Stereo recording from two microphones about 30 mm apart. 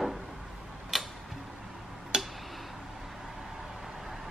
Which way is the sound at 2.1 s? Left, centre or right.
Right.